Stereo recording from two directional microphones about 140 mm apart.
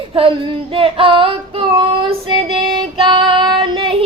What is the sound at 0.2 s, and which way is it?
Child singing, 40° right (ahead or behind).